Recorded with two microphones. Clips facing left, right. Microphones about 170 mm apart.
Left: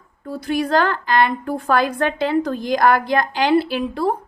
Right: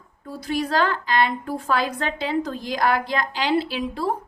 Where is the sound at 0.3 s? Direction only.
60° left (ahead or behind).